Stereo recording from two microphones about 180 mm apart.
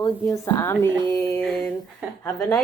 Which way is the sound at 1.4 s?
Centre (ahead or behind).